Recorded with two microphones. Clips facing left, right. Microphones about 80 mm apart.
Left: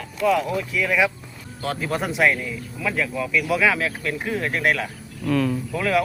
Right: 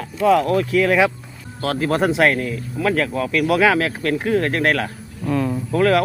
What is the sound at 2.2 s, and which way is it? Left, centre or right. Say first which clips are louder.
Speech: right 3 dB; right.